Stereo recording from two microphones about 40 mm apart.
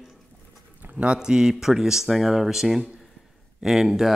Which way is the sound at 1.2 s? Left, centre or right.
Centre.